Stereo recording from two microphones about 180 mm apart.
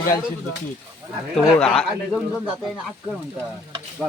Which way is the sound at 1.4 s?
5° left (ahead or behind).